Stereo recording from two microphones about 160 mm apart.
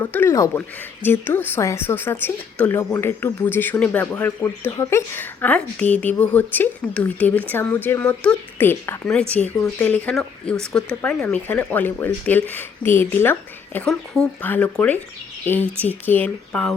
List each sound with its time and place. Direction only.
0.0 s speech: 10° left (ahead or behind)